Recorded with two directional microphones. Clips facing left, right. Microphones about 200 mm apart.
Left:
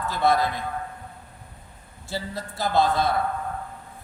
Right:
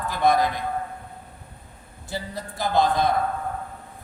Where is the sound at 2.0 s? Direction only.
15° right (ahead or behind).